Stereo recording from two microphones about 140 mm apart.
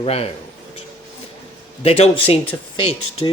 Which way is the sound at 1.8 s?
45° left (ahead or behind).